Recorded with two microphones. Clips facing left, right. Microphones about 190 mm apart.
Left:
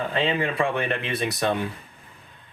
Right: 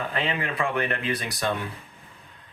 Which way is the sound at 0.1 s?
25° left (ahead or behind).